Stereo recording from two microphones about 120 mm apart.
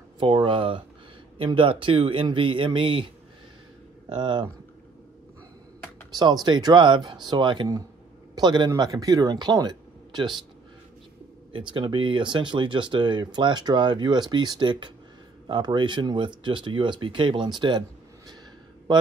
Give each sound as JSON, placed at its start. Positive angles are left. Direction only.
{"t": 0.2, "sound": "speech", "side_deg": -45}
{"t": 4.1, "sound": "speech", "side_deg": -40}
{"t": 6.1, "sound": "speech", "side_deg": -35}
{"t": 11.5, "sound": "speech", "side_deg": -45}